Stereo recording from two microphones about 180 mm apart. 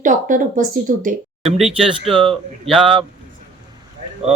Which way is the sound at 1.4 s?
Centre (ahead or behind).